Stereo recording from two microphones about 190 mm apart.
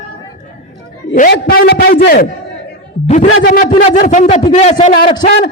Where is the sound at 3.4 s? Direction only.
40° left (ahead or behind).